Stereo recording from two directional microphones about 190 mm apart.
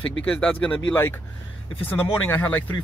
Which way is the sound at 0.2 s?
5° left (ahead or behind).